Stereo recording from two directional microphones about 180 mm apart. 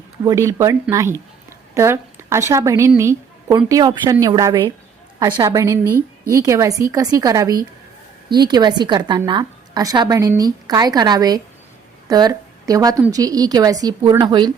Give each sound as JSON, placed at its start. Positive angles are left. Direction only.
{"t": 0.3, "sound": "a woman's voice", "side_deg": -15}